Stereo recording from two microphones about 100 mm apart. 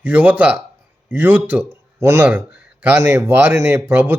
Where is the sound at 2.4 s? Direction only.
15° right (ahead or behind).